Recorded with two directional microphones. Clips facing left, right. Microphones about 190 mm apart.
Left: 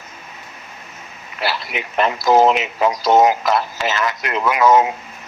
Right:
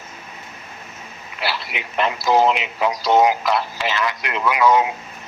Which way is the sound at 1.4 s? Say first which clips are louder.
Left 3 dB; 45° left (ahead or behind).